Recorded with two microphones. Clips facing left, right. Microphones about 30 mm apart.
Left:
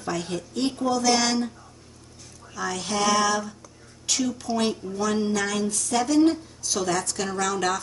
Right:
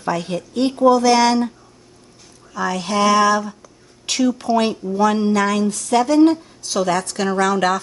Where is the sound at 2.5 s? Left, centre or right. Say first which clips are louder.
Right 7 dB; right.